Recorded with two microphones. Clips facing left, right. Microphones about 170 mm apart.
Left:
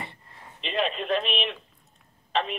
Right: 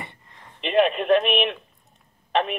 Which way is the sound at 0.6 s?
60° right (ahead or behind).